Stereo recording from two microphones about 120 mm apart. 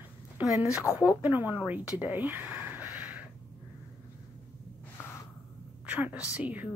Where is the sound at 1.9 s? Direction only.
15° right (ahead or behind).